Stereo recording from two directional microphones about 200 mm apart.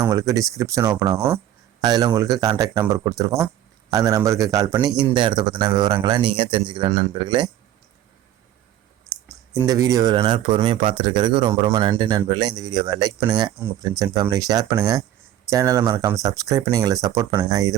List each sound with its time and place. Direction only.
0.1 s speech: 15° right (ahead or behind)
4.9 s speech: 5° right (ahead or behind)
5.1 s speech: 25° right (ahead or behind)
9.6 s speech: 20° right (ahead or behind)
13.6 s speech: 10° right (ahead or behind)